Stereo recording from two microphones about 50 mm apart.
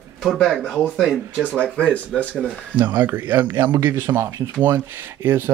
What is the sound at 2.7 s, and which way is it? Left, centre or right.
Speech, right.